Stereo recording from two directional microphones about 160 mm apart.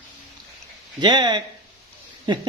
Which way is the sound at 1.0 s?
30° right (ahead or behind).